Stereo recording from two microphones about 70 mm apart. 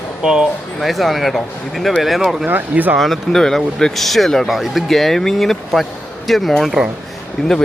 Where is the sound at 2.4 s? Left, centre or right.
Right.